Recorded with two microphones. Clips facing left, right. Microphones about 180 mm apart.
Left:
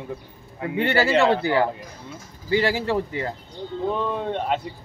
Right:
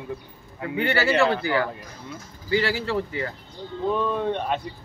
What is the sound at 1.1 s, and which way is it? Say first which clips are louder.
Speech: left 2 dB; 25° left (ahead or behind).